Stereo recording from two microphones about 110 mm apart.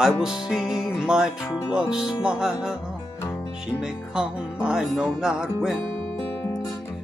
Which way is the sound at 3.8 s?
5° right (ahead or behind).